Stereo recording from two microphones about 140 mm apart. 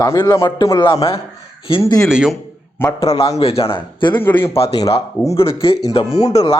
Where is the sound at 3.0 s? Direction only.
40° left (ahead or behind).